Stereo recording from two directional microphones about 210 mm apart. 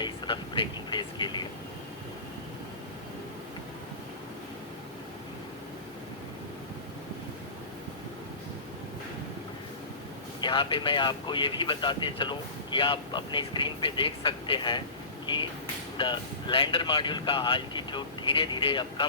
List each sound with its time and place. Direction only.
0.0 s speech: 20° left (ahead or behind)
10.4 s speech: 25° left (ahead or behind)
16.0 s speech: 25° left (ahead or behind)